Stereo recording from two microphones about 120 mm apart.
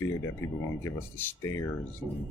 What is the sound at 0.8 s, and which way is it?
Speech, 15° left (ahead or behind).